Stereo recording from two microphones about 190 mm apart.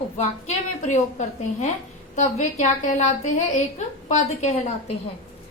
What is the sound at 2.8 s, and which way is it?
Speech, 40° left (ahead or behind).